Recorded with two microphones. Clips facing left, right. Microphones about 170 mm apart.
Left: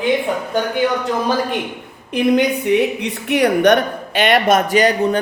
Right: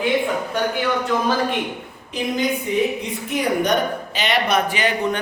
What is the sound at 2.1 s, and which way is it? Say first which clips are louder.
A woman's voice: left 7 dB; 70° left (ahead or behind).